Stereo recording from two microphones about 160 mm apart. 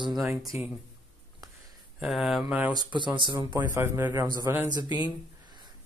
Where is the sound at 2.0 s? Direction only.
Centre (ahead or behind).